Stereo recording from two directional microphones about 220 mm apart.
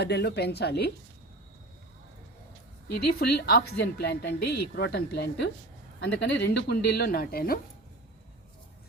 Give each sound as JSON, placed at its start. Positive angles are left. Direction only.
{"t": 0.0, "sound": "a woman's voice", "side_deg": 50}
{"t": 3.2, "sound": "a woman's voice", "side_deg": 45}